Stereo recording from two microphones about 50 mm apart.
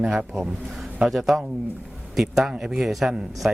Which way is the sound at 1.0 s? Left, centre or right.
Centre.